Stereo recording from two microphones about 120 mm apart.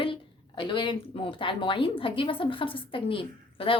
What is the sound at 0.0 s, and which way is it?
A woman's voice, 45° left (ahead or behind).